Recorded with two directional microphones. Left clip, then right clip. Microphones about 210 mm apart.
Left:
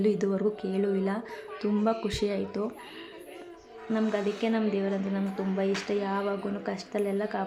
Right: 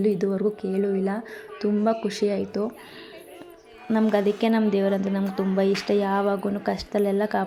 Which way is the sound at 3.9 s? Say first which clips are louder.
Right 7 dB; 25° right (ahead or behind).